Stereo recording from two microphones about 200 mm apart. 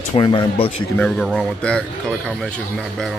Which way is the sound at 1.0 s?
5° left (ahead or behind).